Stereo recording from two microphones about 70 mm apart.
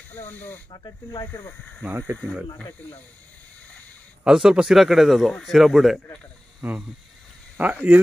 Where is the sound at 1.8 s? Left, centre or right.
Right.